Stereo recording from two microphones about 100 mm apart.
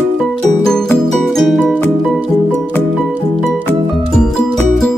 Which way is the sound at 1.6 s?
15° left (ahead or behind).